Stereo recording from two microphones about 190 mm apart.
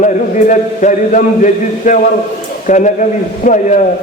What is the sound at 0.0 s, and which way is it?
A man's voice, 40° left (ahead or behind).